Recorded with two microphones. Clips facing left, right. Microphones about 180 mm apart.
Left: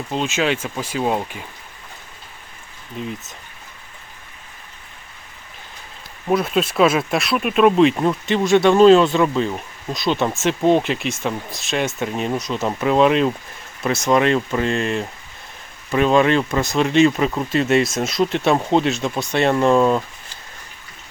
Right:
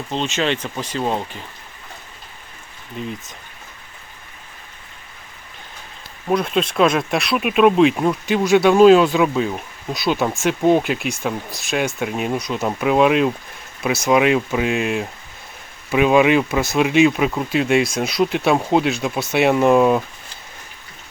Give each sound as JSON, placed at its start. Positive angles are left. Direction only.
{"t": 0.1, "sound": "speech", "side_deg": 5}
{"t": 3.0, "sound": "speech", "side_deg": 0}
{"t": 6.2, "sound": "speech", "side_deg": 5}